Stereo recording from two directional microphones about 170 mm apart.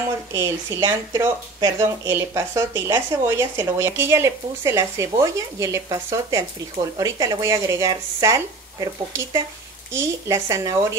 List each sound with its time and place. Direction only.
0.3 s speech: 15° right (ahead or behind)